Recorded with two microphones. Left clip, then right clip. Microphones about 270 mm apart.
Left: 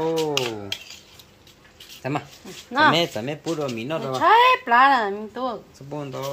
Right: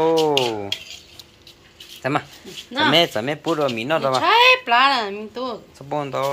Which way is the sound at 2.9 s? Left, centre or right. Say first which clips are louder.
Right 6 dB; centre.